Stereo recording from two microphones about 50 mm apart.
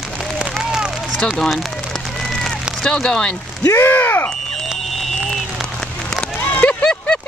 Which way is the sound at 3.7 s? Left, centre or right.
Left.